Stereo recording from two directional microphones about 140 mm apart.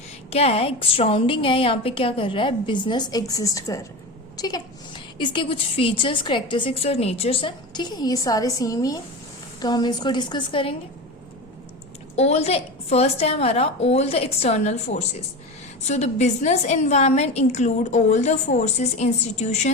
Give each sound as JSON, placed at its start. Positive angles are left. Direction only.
{"t": 0.3, "sound": "a woman's voice", "side_deg": 45}
{"t": 6.8, "sound": "a woman's voice", "side_deg": 45}
{"t": 12.1, "sound": "a woman's voice", "side_deg": 50}